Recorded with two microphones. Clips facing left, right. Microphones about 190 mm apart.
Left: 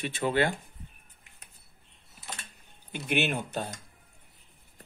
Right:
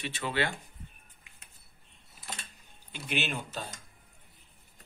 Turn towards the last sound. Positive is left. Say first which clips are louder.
# left 6 dB
turn(degrees=60)  # may be behind; listen again after turning